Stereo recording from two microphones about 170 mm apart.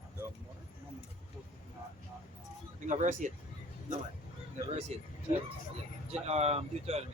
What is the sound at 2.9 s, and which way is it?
Speech, 50° right (ahead or behind).